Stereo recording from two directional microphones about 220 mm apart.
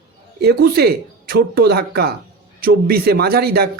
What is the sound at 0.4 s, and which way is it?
A man's voice, 45° right (ahead or behind).